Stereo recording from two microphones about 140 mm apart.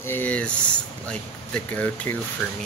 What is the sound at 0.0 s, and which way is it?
Speech, 15° left (ahead or behind).